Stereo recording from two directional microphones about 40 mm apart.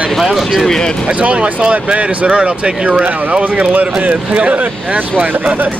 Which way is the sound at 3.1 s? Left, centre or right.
Right.